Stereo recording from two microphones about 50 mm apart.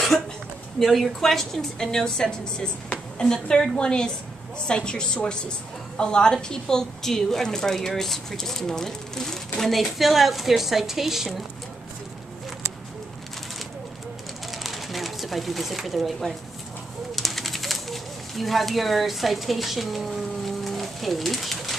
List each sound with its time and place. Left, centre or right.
0.7 s a woman's voice: centre
14.5 s pigeon: centre
17.1 s bird: centre